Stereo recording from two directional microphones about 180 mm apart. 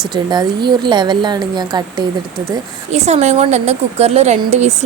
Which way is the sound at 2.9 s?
40° right (ahead or behind).